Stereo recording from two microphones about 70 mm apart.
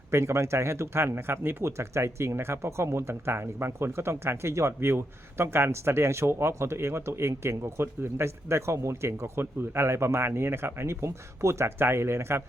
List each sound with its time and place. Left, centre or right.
0.1 s speech: right